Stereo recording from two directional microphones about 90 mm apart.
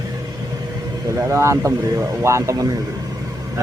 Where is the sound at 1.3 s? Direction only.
35° right (ahead or behind).